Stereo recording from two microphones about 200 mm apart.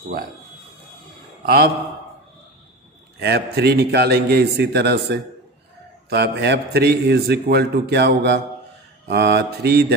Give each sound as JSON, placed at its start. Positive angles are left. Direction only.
{"t": 1.4, "sound": "speech", "side_deg": -50}
{"t": 3.2, "sound": "a man's voice", "side_deg": -55}